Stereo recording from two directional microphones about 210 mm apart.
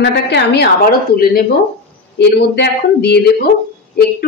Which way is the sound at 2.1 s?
50° left (ahead or behind).